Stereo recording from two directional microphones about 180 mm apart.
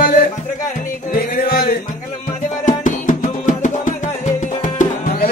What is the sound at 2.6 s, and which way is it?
Music, 45° left (ahead or behind).